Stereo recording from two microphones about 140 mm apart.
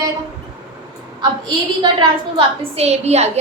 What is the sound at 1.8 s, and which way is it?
A woman's voice, 35° right (ahead or behind).